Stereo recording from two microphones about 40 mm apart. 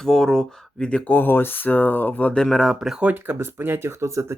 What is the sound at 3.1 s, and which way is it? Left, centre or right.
Speech, right.